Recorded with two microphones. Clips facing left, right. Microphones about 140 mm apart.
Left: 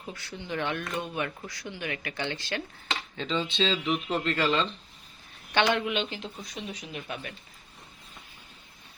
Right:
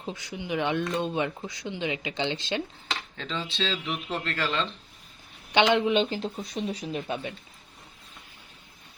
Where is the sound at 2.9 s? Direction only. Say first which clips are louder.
Left 4 dB; centre (ahead or behind).